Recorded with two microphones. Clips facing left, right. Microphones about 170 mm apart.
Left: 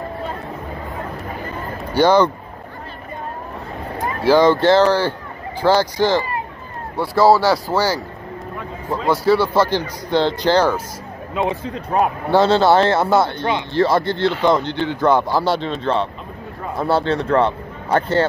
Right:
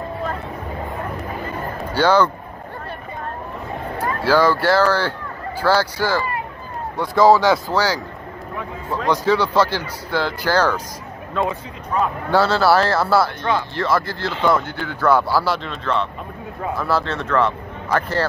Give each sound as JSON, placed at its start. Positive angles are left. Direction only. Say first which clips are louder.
{"t": 2.0, "sound": "speech", "louder": "left 2 dB", "side_deg": 15}
{"t": 4.0, "sound": "speech", "louder": "left 3 dB", "side_deg": 15}
{"t": 15.5, "sound": "speech", "louder": "left 3 dB", "side_deg": 30}